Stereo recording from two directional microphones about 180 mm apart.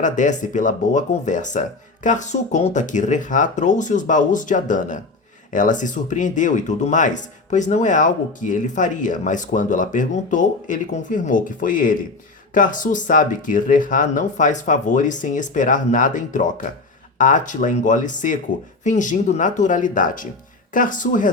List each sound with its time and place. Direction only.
0.0 s speech: 45° left (ahead or behind)